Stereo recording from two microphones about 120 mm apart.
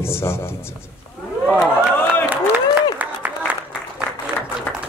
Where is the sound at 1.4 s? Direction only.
15° left (ahead or behind).